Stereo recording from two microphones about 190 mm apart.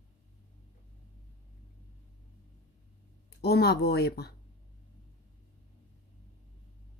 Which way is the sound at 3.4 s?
55° left (ahead or behind).